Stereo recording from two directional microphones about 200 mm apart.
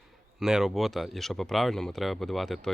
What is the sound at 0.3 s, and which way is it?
Speech, centre (ahead or behind).